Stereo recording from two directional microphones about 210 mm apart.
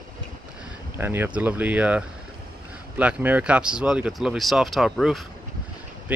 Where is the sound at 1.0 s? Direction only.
10° right (ahead or behind).